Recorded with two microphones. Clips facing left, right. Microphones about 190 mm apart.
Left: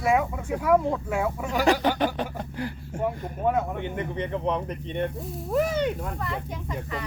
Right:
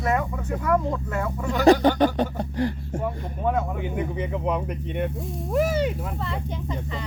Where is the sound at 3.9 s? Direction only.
5° right (ahead or behind).